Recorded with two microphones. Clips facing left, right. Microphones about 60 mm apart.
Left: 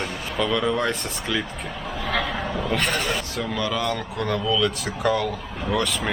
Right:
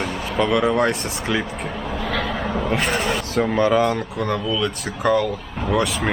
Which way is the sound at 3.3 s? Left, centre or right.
Right.